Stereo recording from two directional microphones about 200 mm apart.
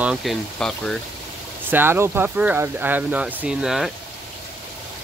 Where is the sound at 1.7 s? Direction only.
10° right (ahead or behind).